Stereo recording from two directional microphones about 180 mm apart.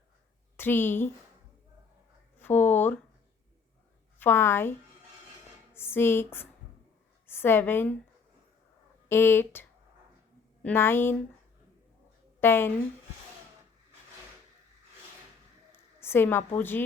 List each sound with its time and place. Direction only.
0.5 s a woman's voice: 10° left (ahead or behind)
2.4 s a sound: 10° left (ahead or behind)
4.2 s speech: 10° left (ahead or behind)
5.7 s a woman's voice: 15° left (ahead or behind)
9.0 s speech: 15° left (ahead or behind)
12.4 s speech: 15° left (ahead or behind)
15.7 s a woman's voice: 15° left (ahead or behind)